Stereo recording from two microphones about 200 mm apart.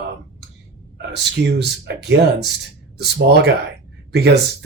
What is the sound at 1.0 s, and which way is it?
Speech, 60° right (ahead or behind).